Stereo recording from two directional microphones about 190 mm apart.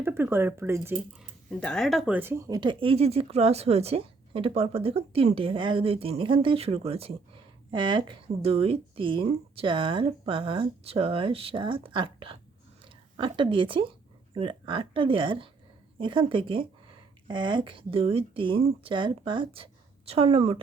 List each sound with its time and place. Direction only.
0.0 s speech: 10° right (ahead or behind)
1.5 s speech: centre (ahead or behind); by 20.6 s 30° right (ahead or behind)